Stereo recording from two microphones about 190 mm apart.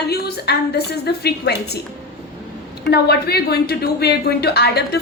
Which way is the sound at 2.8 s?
60° left (ahead or behind).